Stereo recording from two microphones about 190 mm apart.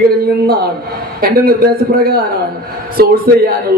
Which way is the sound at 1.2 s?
50° right (ahead or behind).